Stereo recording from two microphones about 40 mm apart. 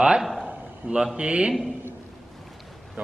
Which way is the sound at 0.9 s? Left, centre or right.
Right.